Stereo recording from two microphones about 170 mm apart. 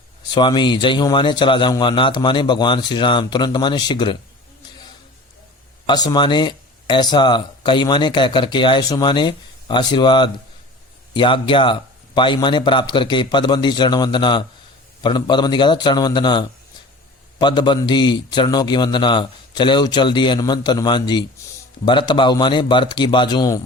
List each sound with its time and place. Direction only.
0.3 s speech: 25° left (ahead or behind)
5.8 s speech: 25° left (ahead or behind)